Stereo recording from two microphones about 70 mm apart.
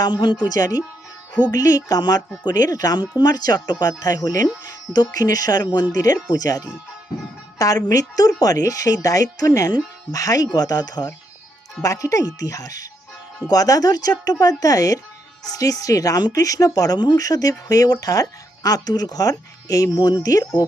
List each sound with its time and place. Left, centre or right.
0.0 s speech: left
0.4 s speech: left
11.8 s speech: left